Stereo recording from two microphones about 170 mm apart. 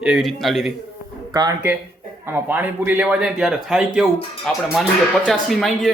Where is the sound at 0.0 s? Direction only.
Centre (ahead or behind).